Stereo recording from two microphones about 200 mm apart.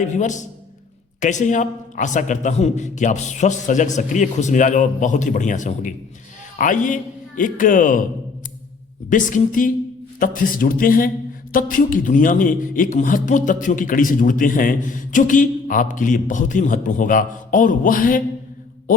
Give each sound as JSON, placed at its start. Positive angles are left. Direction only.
{"t": 0.0, "sound": "a man's voice", "side_deg": 40}
{"t": 9.0, "sound": "a man's voice", "side_deg": 40}